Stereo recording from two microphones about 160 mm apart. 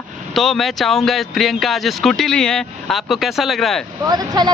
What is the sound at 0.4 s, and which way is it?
Speech, centre (ahead or behind).